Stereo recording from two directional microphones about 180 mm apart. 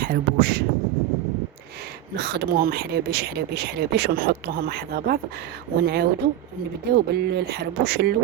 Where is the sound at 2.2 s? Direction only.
60° right (ahead or behind).